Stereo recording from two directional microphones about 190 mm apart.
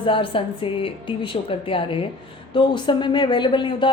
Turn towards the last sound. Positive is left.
turn(degrees=25)  # may be behind; listen again after turning